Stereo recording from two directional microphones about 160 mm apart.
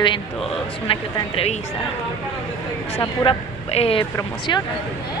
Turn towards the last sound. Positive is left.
turn(degrees=25)  # may be behind; listen again after turning